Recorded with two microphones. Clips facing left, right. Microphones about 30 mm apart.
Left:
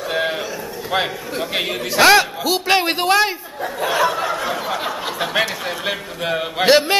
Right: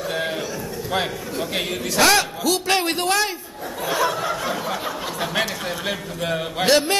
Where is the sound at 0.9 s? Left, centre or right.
Centre.